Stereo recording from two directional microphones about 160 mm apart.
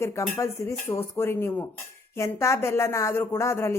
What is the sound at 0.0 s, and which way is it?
A woman's voice, 20° left (ahead or behind).